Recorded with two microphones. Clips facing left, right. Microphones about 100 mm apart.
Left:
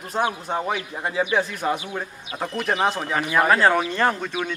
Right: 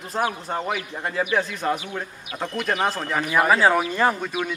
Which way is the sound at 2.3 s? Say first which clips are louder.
Left 1 dB; 25° left (ahead or behind).